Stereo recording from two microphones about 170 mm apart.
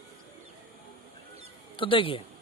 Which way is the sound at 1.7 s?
30° left (ahead or behind).